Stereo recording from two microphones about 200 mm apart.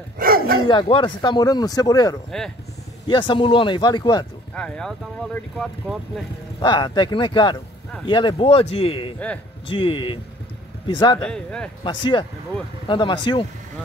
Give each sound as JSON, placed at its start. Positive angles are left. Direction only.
{"t": 0.2, "sound": "bow-wow", "side_deg": -45}
{"t": 0.7, "sound": "speech", "side_deg": 25}
{"t": 4.6, "sound": "speech", "side_deg": 5}
{"t": 6.6, "sound": "speech", "side_deg": 20}
{"t": 11.1, "sound": "speech", "side_deg": 5}
{"t": 11.8, "sound": "speech", "side_deg": 25}